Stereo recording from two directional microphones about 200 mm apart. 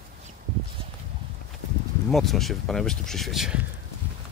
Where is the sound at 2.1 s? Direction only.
Centre (ahead or behind).